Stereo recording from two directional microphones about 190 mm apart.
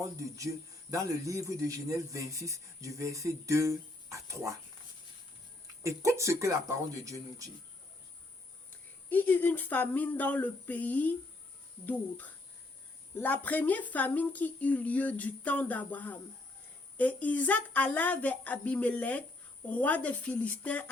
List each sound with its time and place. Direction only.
0.0 s speech: 15° right (ahead or behind)
5.8 s speech: 15° right (ahead or behind)
9.0 s speech: 10° left (ahead or behind)
13.1 s speech: 10° left (ahead or behind)